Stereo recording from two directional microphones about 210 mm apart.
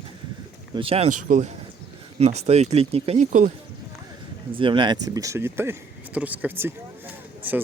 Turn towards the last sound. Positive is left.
turn(degrees=-10)  # may be behind; listen again after turning